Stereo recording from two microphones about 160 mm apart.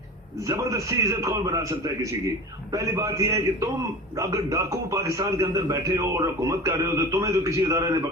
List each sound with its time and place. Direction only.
0.4 s a man's voice: 20° right (ahead or behind)